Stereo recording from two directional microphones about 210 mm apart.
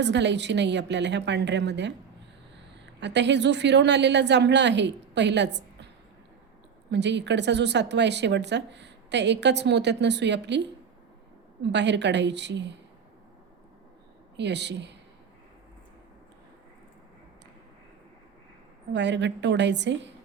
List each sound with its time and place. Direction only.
0.0 s speech: 55° right (ahead or behind)
3.0 s speech: 55° right (ahead or behind)
6.9 s speech: 55° right (ahead or behind)
11.6 s speech: 55° right (ahead or behind)
14.3 s speech: 55° right (ahead or behind)
18.9 s speech: 55° right (ahead or behind)